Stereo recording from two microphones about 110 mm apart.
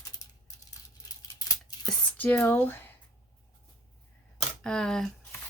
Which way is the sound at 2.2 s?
20° left (ahead or behind).